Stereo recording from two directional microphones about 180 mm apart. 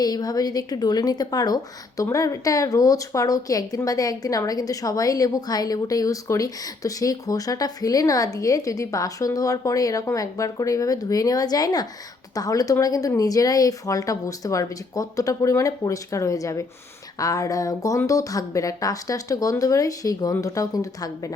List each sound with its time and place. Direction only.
0.0 s a woman's voice: 20° left (ahead or behind)